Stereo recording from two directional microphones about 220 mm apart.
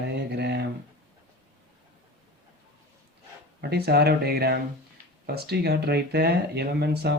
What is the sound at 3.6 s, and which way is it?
Speech, 45° right (ahead or behind).